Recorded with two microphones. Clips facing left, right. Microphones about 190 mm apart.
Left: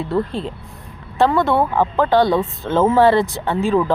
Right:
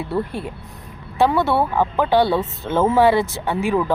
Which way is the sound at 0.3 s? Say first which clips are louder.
Left 3 dB; 20° left (ahead or behind).